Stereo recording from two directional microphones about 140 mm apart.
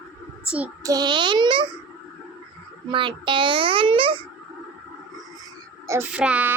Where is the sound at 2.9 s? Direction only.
35° right (ahead or behind).